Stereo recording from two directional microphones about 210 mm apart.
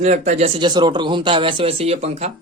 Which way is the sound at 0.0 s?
35° right (ahead or behind).